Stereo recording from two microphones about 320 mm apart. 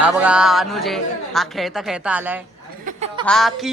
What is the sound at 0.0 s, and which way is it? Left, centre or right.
A woman's voice, centre.